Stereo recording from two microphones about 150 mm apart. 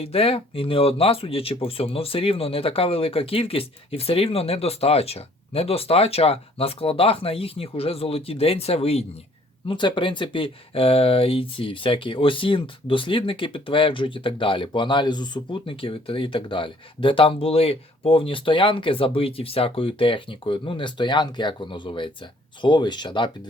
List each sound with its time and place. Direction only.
0.0 s speech: 40° left (ahead or behind)
9.6 s speech: 30° left (ahead or behind)